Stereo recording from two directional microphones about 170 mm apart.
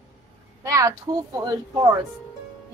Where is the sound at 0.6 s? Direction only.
20° right (ahead or behind).